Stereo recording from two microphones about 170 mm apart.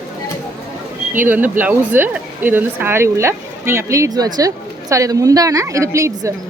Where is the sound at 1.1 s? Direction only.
10° right (ahead or behind).